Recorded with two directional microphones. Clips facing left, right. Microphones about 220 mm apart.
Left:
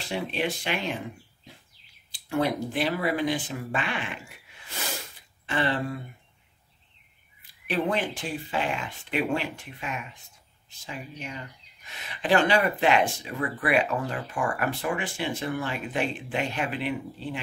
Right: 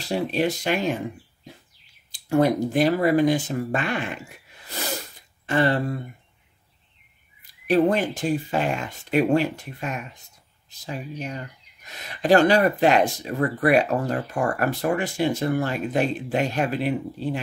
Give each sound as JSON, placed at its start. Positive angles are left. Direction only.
{"t": 0.1, "sound": "speech", "side_deg": -40}
{"t": 2.1, "sound": "speech", "side_deg": -45}
{"t": 5.5, "sound": "speech", "side_deg": -40}
{"t": 7.6, "sound": "speech", "side_deg": -40}